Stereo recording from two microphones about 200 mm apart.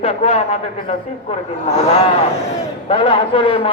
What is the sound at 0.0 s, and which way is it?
Speech, 30° left (ahead or behind).